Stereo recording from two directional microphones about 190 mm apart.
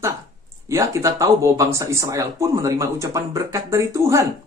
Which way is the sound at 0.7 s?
15° right (ahead or behind).